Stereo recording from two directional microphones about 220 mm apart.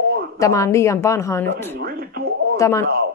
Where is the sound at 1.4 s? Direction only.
45° right (ahead or behind).